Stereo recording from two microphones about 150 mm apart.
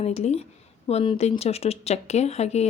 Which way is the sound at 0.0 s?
45° left (ahead or behind).